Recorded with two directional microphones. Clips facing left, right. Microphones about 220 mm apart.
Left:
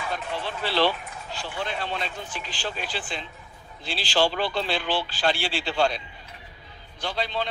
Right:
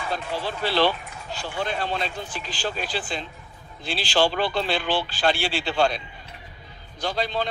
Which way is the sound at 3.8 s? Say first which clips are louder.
Right 2 dB; 50° right (ahead or behind).